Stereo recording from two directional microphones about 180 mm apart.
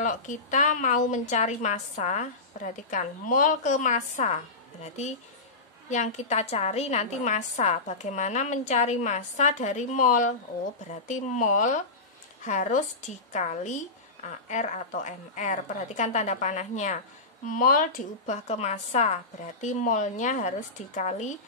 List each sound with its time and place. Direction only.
0.0 s a woman's voice: 45° left (ahead or behind)
5.9 s a woman's voice: 40° left (ahead or behind)